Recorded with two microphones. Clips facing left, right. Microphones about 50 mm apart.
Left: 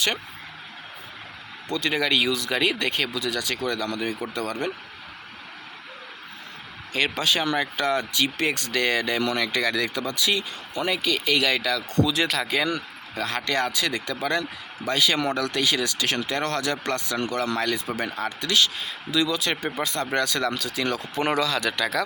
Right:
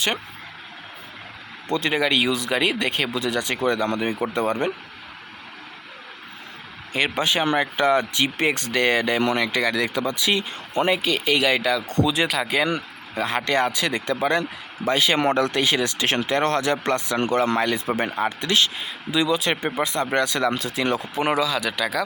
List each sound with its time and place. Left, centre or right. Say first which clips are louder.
1.7 s speech: right 3 dB; right
2.0 s speech: even; centre
6.9 s speech: right 2 dB; right
11.9 s speech: right 1 dB; right
12.3 s speech: right 2 dB; centre
21.2 s speech: right 1 dB; centre